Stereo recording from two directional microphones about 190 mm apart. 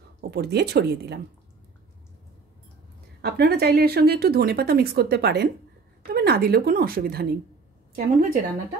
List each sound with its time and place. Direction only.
0.2 s speech: 55° right (ahead or behind)
3.2 s a woman's voice: 55° right (ahead or behind)